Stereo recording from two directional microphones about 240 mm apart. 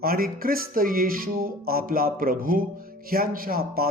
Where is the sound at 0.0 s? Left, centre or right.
Right.